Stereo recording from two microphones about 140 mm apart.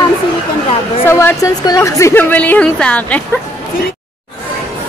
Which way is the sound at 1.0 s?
20° left (ahead or behind).